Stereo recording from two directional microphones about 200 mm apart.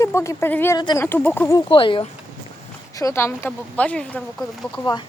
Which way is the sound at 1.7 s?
25° left (ahead or behind).